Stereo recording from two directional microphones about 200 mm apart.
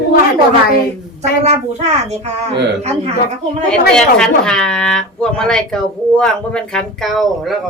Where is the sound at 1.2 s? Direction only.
35° right (ahead or behind).